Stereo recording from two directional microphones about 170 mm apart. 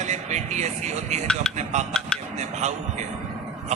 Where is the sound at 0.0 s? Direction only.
45° right (ahead or behind).